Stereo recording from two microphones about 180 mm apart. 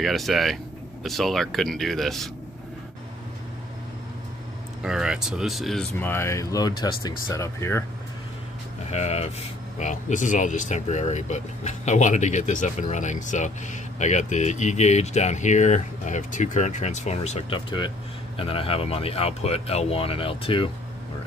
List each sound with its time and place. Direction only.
0.0 s speech: centre (ahead or behind)
4.8 s speech: 5° right (ahead or behind)
5.9 s speech: 10° left (ahead or behind)
8.8 s speech: 40° left (ahead or behind)